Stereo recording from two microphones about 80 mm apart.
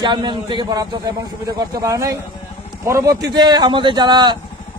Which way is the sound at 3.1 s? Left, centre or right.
Right.